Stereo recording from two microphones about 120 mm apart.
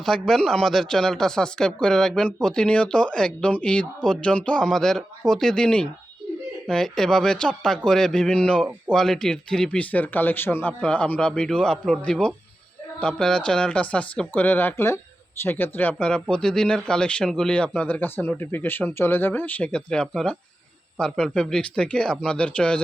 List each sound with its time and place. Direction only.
0.0 s speech: 5° left (ahead or behind)